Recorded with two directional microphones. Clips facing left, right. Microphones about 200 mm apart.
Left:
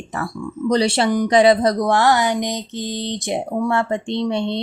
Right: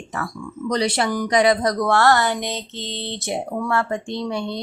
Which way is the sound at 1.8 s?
15° left (ahead or behind).